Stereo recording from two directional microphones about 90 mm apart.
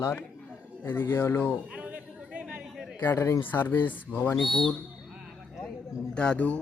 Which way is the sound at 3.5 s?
20° left (ahead or behind).